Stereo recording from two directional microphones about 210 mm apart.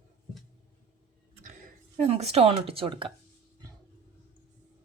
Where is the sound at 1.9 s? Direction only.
30° right (ahead or behind).